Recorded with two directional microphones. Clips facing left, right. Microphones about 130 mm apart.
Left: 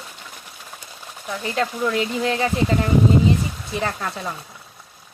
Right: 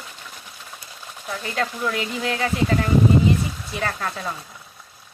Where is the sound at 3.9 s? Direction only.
15° left (ahead or behind).